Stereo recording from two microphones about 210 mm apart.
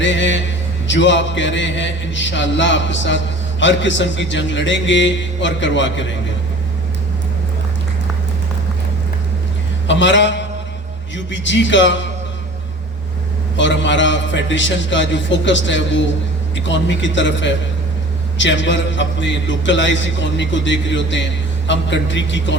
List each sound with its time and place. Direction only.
0.0 s a man's voice: 60° left (ahead or behind)
9.8 s a man's voice: 60° left (ahead or behind)
13.6 s a man's voice: 60° left (ahead or behind)